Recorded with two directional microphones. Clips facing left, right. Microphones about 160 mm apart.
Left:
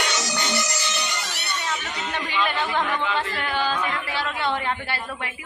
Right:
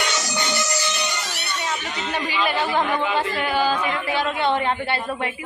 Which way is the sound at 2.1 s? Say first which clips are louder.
Right 2 dB; 5° right (ahead or behind).